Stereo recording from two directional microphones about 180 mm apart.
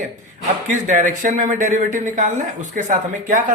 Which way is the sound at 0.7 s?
45° right (ahead or behind).